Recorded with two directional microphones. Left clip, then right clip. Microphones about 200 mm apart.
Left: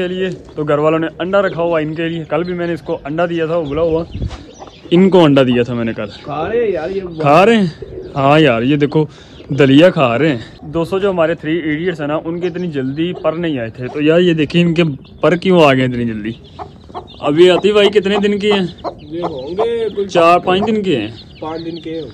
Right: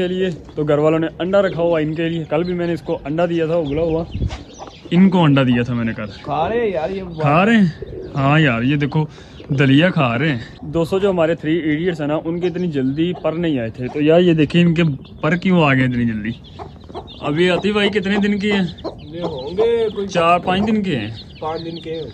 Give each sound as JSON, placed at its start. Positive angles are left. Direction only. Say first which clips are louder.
{"t": 0.0, "sound": "a man's voice", "louder": "left 1 dB", "side_deg": 0}
{"t": 4.8, "sound": "a man's voice", "louder": "left 7 dB", "side_deg": 10}
{"t": 6.2, "sound": "speech", "louder": "left 2 dB", "side_deg": -45}
{"t": 7.2, "sound": "a man's voice", "louder": "left 6 dB", "side_deg": 15}
{"t": 10.8, "sound": "a man's voice", "louder": "left 2 dB", "side_deg": 0}
{"t": 14.0, "sound": "speech", "louder": "left 2 dB", "side_deg": 50}
{"t": 14.4, "sound": "a man's voice", "louder": "left 3 dB", "side_deg": 25}
{"t": 21.5, "sound": "speech", "louder": "left 1 dB", "side_deg": -25}